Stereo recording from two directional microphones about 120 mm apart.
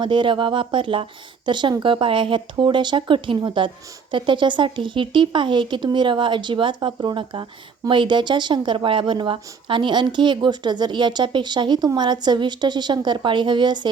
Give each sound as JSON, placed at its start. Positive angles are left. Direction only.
{"t": 0.0, "sound": "speech", "side_deg": -40}